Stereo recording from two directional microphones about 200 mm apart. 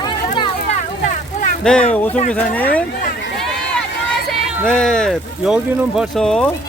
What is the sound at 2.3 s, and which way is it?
Speech, 10° left (ahead or behind).